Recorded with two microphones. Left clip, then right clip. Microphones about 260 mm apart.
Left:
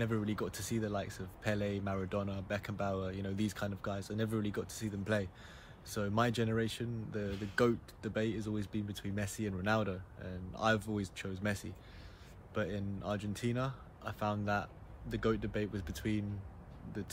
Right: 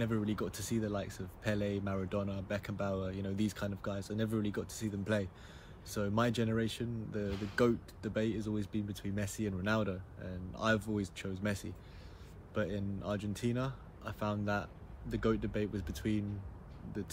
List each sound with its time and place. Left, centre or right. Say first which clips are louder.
0.0 s speech: even; centre
7.2 s speech: right 1 dB; centre
7.5 s speech: even; centre